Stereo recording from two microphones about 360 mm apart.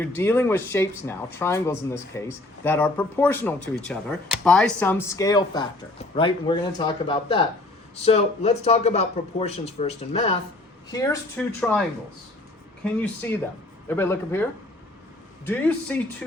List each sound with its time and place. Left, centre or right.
0.0 s speech: centre
15.4 s speech: centre